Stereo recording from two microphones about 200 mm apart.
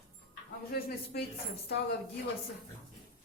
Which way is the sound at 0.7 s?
50° left (ahead or behind).